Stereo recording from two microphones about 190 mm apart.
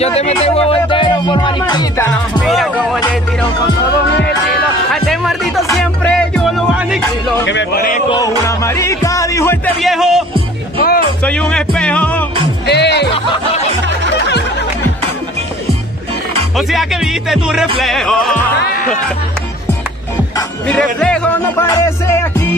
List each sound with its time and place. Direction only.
0.0 s music: 35° left (ahead or behind)
2.4 s music: centre (ahead or behind)
4.9 s music: centre (ahead or behind)
7.4 s a sound: 65° left (ahead or behind)
8.5 s music: 15° left (ahead or behind)
9.8 s music: centre (ahead or behind)
10.8 s music: 50° left (ahead or behind)
11.2 s music: 5° left (ahead or behind)
12.6 s music: 60° left (ahead or behind)
13.1 s music: 30° left (ahead or behind)
16.5 s music: centre (ahead or behind)
21.0 s music: 5° left (ahead or behind)